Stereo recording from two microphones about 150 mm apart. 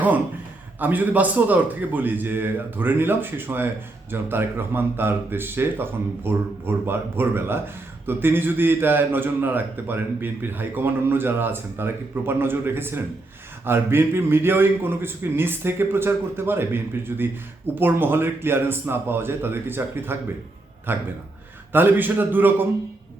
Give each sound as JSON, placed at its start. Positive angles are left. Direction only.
{"t": 0.8, "sound": "a man's voice", "side_deg": -10}